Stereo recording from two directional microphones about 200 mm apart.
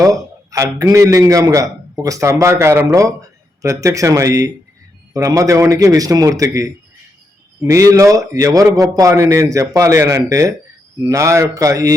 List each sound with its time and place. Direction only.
0.5 s a man's voice: 15° right (ahead or behind)